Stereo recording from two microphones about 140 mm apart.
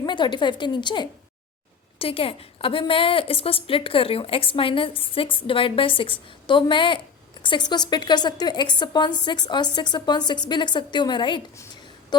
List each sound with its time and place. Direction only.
0.0 s a woman's voice: 35° left (ahead or behind)